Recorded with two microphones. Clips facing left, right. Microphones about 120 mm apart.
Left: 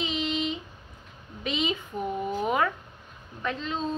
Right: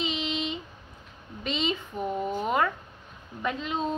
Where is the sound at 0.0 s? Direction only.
Centre (ahead or behind).